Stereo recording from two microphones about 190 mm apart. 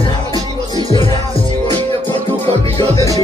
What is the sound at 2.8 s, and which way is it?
Music, 15° left (ahead or behind).